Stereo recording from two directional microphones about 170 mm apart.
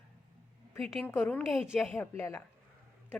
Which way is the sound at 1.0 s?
10° left (ahead or behind).